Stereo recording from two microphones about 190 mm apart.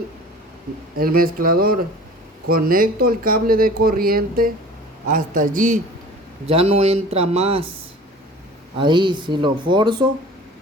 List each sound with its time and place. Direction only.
0.9 s speech: 50° right (ahead or behind)
6.4 s speech: 30° right (ahead or behind)
8.8 s speech: 25° right (ahead or behind)